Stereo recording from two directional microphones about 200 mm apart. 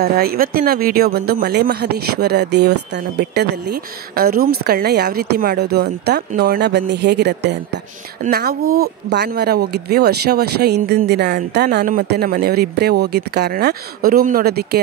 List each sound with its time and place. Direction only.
0.0 s speech: 50° right (ahead or behind)